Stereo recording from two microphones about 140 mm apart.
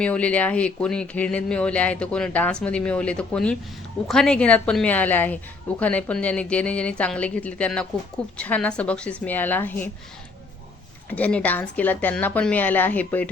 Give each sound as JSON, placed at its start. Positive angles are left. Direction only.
{"t": 0.0, "sound": "speech", "side_deg": 10}
{"t": 11.1, "sound": "speech", "side_deg": 10}